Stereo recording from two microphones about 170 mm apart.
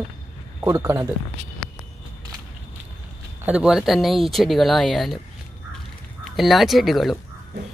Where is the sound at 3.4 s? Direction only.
5° right (ahead or behind).